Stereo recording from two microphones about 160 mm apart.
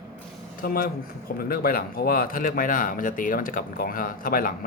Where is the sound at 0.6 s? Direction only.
65° left (ahead or behind).